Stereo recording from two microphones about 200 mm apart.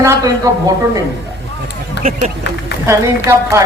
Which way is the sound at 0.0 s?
15° right (ahead or behind).